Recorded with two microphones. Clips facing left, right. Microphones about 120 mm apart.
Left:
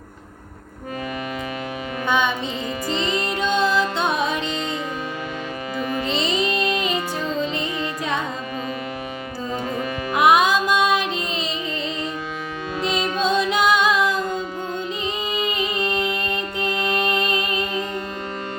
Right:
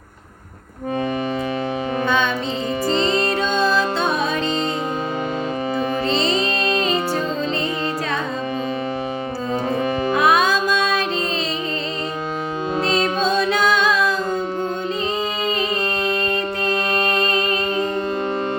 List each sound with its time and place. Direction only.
2.0 s music: 15° left (ahead or behind)
2.9 s music: 35° right (ahead or behind)
6.1 s music: 35° right (ahead or behind)
9.7 s music: 30° right (ahead or behind)
10.2 s music: 15° left (ahead or behind)
13.2 s music: 20° left (ahead or behind)